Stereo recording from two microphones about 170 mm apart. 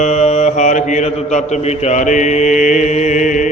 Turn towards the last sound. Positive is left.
turn(degrees=45)  # may be behind; listen again after turning